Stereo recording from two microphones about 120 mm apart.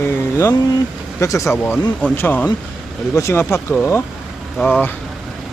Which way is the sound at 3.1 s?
20° left (ahead or behind).